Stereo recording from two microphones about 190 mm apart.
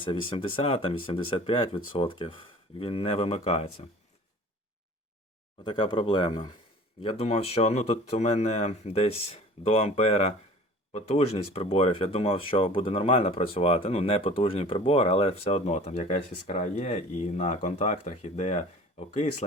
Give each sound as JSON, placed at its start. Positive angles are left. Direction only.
{"t": 0.0, "sound": "speech", "side_deg": 25}
{"t": 5.6, "sound": "speech", "side_deg": 25}